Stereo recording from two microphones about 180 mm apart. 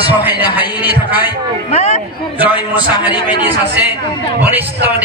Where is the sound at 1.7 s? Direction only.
40° left (ahead or behind).